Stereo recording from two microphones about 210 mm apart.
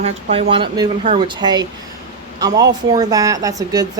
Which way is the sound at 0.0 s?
30° right (ahead or behind).